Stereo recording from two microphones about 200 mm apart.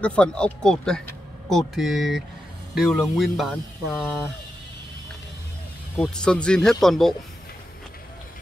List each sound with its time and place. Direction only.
0.0 s speech: 5° left (ahead or behind)
5.9 s speech: 5° left (ahead or behind)